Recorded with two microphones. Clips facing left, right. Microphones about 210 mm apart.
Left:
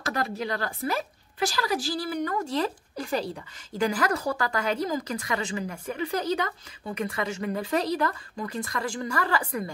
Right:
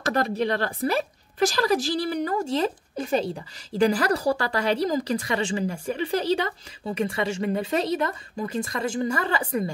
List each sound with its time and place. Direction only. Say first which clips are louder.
0.0 s speech: right 6 dB; 40° right (ahead or behind)
2.2 s speech: right 3 dB; 25° right (ahead or behind)